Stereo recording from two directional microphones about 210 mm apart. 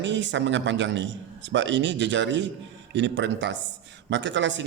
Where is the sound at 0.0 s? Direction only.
60° right (ahead or behind).